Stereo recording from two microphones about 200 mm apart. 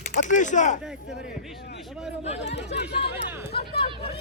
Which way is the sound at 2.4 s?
60° left (ahead or behind).